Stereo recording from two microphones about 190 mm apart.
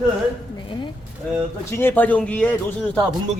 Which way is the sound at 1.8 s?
10° left (ahead or behind).